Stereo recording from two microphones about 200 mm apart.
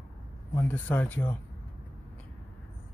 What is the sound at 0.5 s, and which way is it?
Speech, 10° left (ahead or behind).